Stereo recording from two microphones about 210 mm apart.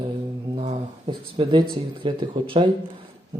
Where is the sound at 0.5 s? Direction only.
30° right (ahead or behind).